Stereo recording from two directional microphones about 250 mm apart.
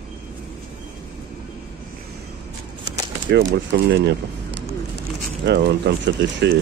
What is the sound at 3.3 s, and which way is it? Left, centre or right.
Speech, right.